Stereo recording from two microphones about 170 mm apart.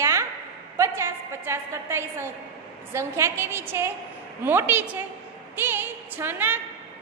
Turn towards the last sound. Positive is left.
turn(degrees=-10)  # may be behind; listen again after turning